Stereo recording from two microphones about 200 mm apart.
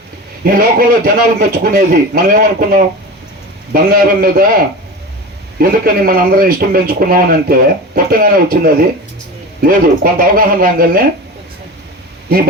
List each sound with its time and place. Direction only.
0.4 s a man's voice: 45° right (ahead or behind)
5.5 s a man's voice: 45° right (ahead or behind)